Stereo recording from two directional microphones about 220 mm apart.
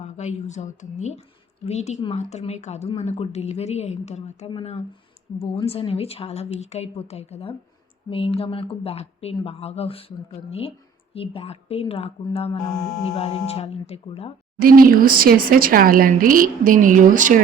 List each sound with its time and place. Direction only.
0.0 s a woman's voice: 30° left (ahead or behind)
11.1 s a woman's voice: 25° left (ahead or behind)
14.6 s speech: 40° right (ahead or behind)